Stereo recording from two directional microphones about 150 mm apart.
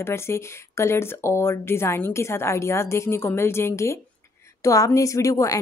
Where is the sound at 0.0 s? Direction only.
15° left (ahead or behind).